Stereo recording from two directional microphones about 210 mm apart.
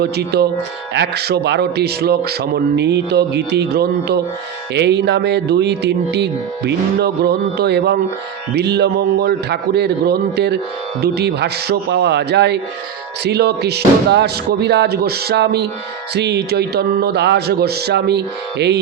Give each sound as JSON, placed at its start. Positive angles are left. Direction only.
{"t": 0.0, "sound": "speech", "side_deg": -50}